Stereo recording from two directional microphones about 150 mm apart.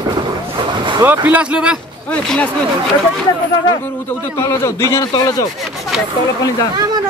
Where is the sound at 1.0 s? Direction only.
15° right (ahead or behind).